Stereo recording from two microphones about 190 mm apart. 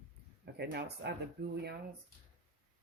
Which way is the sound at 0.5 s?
60° right (ahead or behind).